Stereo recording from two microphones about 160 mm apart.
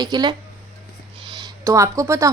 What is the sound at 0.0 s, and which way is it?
A woman's voice, 25° right (ahead or behind).